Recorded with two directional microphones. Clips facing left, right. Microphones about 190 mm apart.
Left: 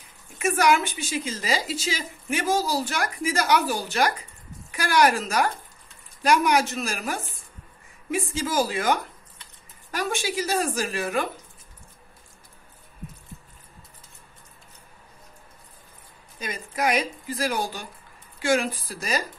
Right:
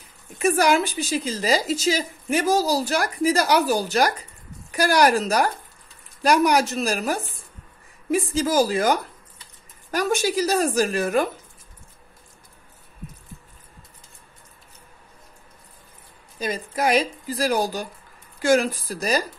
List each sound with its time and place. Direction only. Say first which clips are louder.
0.4 s a woman's voice: right 2 dB; 35° right (ahead or behind)
16.3 s a woman's voice: right 4 dB; 30° right (ahead or behind)